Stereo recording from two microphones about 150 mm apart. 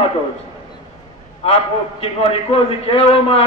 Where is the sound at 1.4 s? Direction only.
40° left (ahead or behind).